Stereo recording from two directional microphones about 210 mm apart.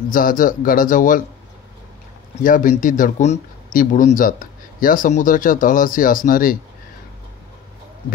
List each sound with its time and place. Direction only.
0.1 s speech: 40° left (ahead or behind)
2.4 s speech: 40° left (ahead or behind)